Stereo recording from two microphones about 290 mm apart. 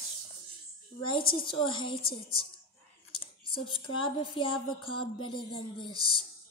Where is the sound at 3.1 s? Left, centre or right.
Centre.